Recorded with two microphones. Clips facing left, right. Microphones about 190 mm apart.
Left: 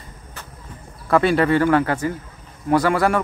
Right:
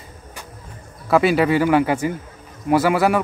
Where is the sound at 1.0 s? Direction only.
5° right (ahead or behind).